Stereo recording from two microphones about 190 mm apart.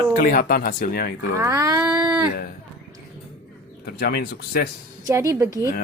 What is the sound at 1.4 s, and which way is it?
Speech, 15° right (ahead or behind).